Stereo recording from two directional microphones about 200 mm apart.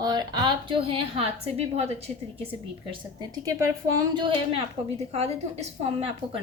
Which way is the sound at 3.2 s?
15° right (ahead or behind).